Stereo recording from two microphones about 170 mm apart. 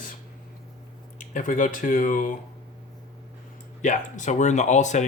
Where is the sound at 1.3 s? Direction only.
50° left (ahead or behind).